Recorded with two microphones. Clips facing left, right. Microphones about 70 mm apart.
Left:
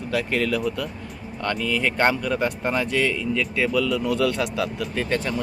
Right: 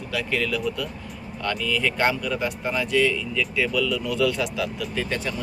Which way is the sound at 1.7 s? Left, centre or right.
Left.